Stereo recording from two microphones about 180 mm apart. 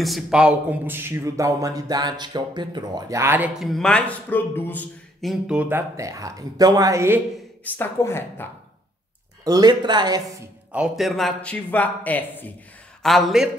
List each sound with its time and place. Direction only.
0.0 s a man's voice: centre (ahead or behind)
5.3 s a man's voice: 5° right (ahead or behind)
7.6 s a man's voice: 10° left (ahead or behind)
9.4 s speech: 20° right (ahead or behind)
10.7 s a man's voice: 5° right (ahead or behind)